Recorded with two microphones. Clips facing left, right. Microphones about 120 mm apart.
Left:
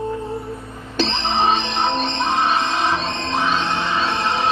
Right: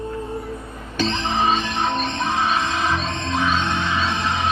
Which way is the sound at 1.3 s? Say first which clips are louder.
Left 3 dB; 25° left (ahead or behind).